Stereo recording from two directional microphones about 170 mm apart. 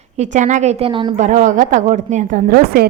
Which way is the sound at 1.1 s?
45° right (ahead or behind).